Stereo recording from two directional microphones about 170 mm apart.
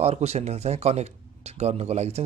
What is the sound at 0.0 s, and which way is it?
Speech, 40° right (ahead or behind).